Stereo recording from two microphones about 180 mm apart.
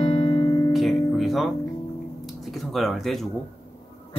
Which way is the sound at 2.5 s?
Centre (ahead or behind).